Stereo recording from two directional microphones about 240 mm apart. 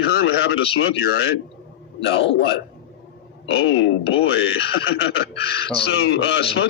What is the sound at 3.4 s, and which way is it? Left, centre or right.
Speech, left.